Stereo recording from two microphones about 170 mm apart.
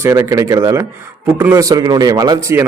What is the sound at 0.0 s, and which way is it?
A man's voice, 20° right (ahead or behind).